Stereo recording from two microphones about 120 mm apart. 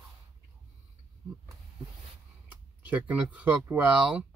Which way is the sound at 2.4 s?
15° right (ahead or behind).